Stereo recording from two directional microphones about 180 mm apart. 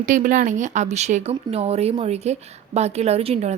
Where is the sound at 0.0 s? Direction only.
45° right (ahead or behind).